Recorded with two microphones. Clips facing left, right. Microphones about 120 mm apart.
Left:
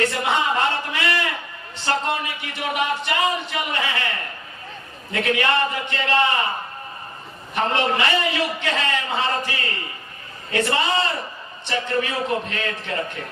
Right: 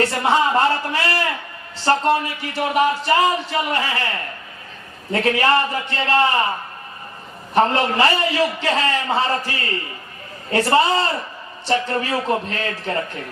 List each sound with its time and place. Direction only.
0.0 s a sound: 35° right (ahead or behind)
1.8 s speech: 35° right (ahead or behind)
5.1 s speech: 35° right (ahead or behind)
7.5 s speech: 35° right (ahead or behind)